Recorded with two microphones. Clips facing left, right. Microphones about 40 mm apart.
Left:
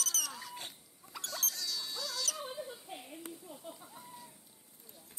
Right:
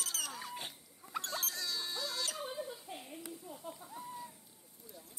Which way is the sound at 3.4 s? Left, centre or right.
Centre.